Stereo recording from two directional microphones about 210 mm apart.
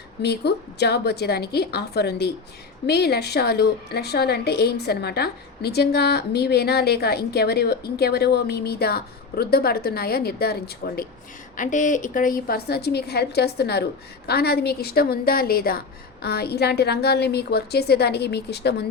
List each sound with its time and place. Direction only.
0.2 s a woman's voice: 50° left (ahead or behind)